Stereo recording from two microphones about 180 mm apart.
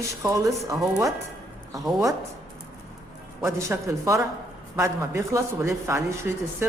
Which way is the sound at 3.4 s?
15° right (ahead or behind).